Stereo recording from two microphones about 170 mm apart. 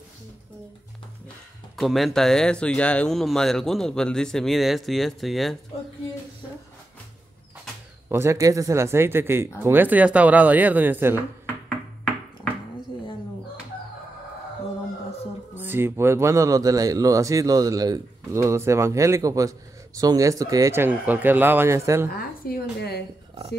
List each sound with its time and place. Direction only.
1.8 s speech: centre (ahead or behind)
8.1 s speech: 15° right (ahead or behind)
15.5 s speech: 10° right (ahead or behind)
22.5 s a sound: 70° left (ahead or behind)